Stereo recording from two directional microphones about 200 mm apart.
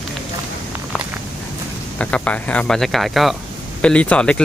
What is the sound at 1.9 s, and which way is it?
Speech, 5° left (ahead or behind).